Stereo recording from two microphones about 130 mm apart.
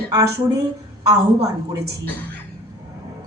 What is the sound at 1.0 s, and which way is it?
Speech, 25° right (ahead or behind).